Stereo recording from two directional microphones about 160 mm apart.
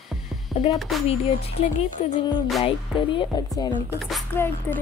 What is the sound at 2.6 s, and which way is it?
Speech, 30° left (ahead or behind).